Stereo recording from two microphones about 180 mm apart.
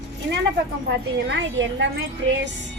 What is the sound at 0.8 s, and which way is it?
Speech, 80° right.